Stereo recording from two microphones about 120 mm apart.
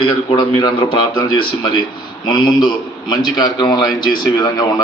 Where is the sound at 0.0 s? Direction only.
45° left (ahead or behind).